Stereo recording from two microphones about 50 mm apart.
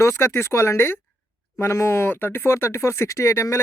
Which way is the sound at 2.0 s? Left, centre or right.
Left.